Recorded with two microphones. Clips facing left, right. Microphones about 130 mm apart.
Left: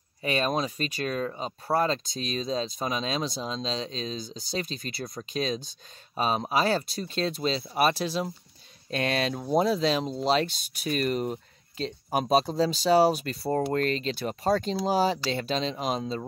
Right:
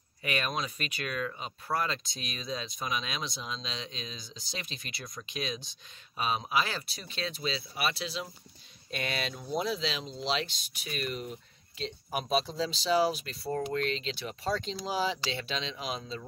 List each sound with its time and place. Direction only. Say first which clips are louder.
0.2 s speech: left 6 dB; 30° left (ahead or behind)